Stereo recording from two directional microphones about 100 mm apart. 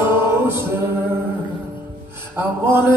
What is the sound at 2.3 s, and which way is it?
Mantra, 20° right (ahead or behind).